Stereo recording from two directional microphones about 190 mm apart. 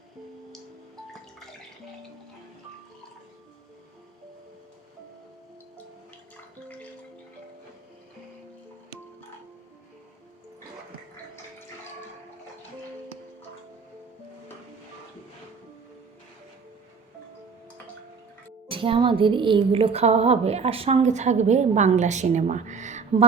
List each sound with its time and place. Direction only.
18.7 s a woman's voice: 25° right (ahead or behind)